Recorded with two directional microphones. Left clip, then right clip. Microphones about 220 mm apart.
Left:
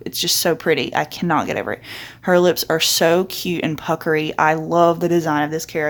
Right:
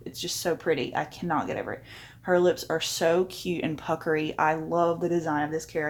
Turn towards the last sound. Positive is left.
turn(degrees=25)  # may be behind; listen again after turning